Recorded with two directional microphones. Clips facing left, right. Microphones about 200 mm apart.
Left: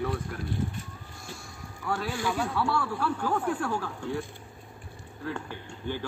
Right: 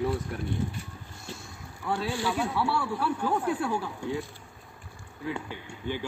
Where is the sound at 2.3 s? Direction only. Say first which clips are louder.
Left 2 dB; 10° right (ahead or behind).